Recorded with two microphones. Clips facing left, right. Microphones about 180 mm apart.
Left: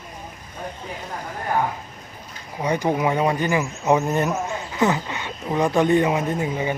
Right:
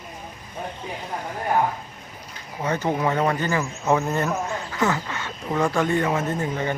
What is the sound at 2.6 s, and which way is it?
Speech, 15° left (ahead or behind).